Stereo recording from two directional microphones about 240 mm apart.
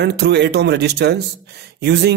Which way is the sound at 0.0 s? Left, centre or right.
Right.